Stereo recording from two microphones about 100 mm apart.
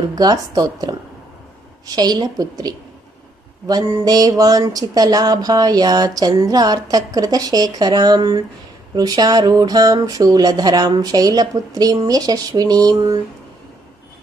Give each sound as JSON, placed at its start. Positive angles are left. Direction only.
{"t": 0.1, "sound": "speech", "side_deg": -40}